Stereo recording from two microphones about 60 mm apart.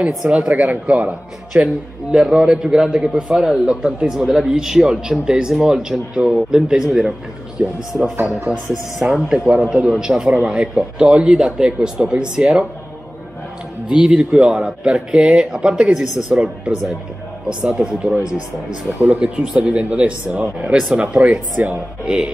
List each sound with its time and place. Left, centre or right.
0.0 s a man's voice: centre
0.4 s a man's voice: right; by 7.2 s centre
7.6 s speech: centre
8.3 s a man's voice: centre
13.8 s a man's voice: centre; by 21.7 s right
22.0 s a man's voice: centre